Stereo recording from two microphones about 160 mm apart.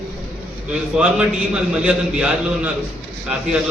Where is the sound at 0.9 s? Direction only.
5° right (ahead or behind).